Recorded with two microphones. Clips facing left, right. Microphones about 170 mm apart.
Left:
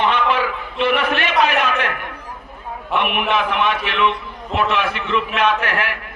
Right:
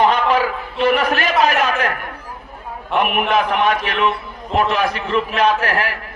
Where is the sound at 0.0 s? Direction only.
40° right (ahead or behind).